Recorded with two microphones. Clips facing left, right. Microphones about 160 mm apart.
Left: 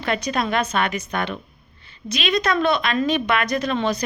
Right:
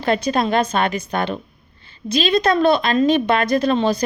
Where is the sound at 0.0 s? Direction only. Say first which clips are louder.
Right 5 dB; 30° right (ahead or behind).